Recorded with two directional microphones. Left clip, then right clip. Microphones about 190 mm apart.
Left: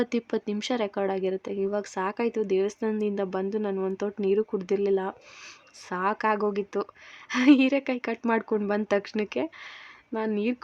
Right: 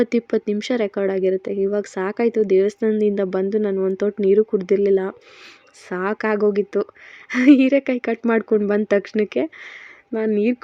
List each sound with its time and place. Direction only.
0.0 s speech: 15° right (ahead or behind)